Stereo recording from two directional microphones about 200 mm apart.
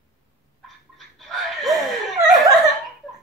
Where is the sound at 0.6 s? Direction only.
Centre (ahead or behind).